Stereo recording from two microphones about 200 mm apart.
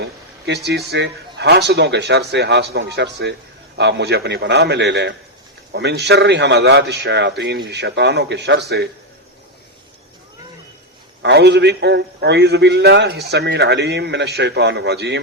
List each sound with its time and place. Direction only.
0.0 s a sound: 55° right (ahead or behind)
0.9 s a man's voice: 60° right (ahead or behind)
11.2 s a man's voice: 60° right (ahead or behind)